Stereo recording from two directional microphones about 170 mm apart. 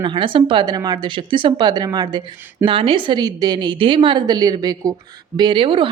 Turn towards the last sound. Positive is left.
turn(degrees=-30)  # may be behind; listen again after turning